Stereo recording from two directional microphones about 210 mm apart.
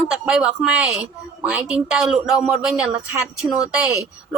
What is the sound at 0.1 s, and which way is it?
Speech, 5° right (ahead or behind).